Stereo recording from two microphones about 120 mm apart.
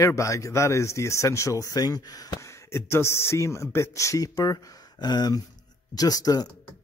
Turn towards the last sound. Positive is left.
turn(degrees=30)  # may be behind; listen again after turning